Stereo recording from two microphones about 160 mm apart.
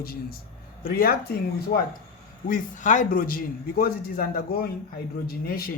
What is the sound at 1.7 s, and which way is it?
Speech, 90° left.